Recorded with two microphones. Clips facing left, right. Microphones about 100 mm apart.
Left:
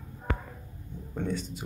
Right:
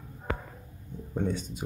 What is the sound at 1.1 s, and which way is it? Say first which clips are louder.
Speech: right 2 dB; 20° right (ahead or behind).